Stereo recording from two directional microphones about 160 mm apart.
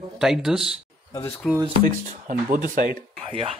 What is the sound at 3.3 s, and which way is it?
Speech, 35° right (ahead or behind).